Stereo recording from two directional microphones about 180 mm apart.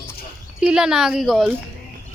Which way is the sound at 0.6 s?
5° right (ahead or behind).